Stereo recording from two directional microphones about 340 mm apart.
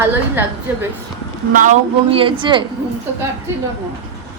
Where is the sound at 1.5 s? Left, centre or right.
Right.